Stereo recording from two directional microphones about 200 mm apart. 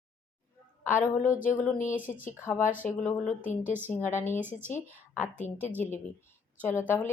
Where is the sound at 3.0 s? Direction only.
5° left (ahead or behind).